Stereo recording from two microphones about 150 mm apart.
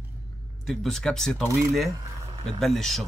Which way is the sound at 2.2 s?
35° right (ahead or behind).